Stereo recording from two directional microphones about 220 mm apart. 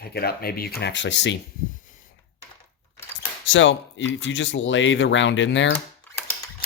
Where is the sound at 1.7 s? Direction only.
35° left (ahead or behind).